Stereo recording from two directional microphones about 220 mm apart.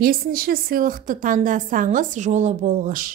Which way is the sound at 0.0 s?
40° right (ahead or behind).